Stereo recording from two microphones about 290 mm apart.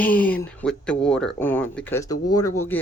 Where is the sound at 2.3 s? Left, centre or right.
Left.